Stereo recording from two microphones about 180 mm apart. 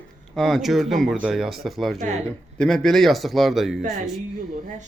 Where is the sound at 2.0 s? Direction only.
40° right (ahead or behind).